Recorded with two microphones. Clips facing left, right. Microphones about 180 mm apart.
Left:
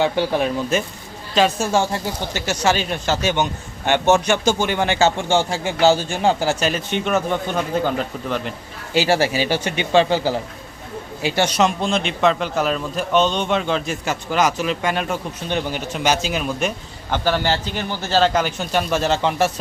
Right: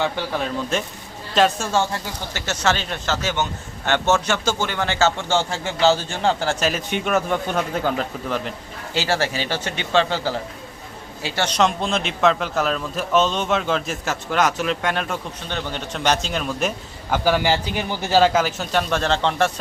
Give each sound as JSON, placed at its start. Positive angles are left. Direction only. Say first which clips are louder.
{"t": 0.0, "sound": "speech", "louder": "left 5 dB", "side_deg": 15}
{"t": 0.7, "sound": "a man's voice", "louder": "left 3 dB", "side_deg": 5}
{"t": 9.0, "sound": "a man's voice", "louder": "left 5 dB", "side_deg": 10}
{"t": 15.4, "sound": "speech", "louder": "left 6 dB", "side_deg": 15}
{"t": 15.9, "sound": "a man's voice", "louder": "even", "side_deg": 5}